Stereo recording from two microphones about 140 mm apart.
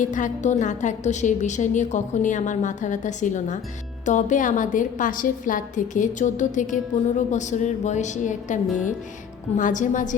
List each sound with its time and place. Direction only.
0.0 s a woman's voice: 65° left (ahead or behind)